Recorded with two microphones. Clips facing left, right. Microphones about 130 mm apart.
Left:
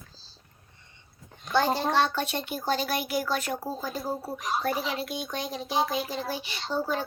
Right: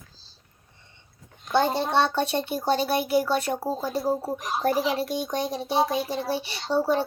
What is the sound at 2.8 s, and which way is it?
Speech, 30° right (ahead or behind).